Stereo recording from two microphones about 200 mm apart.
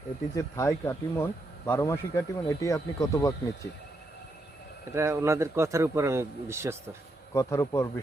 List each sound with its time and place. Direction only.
0.3 s speech: 15° left (ahead or behind)
4.9 s a man's voice: 15° right (ahead or behind)
7.3 s speech: 15° left (ahead or behind)